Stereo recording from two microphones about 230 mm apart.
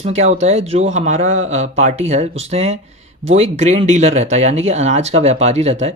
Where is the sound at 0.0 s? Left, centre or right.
Right.